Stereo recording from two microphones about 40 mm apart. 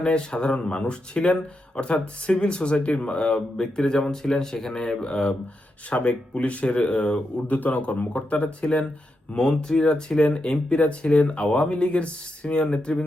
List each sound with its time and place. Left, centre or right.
0.0 s speech: left
7.5 s a man's voice: left
7.8 s speech: left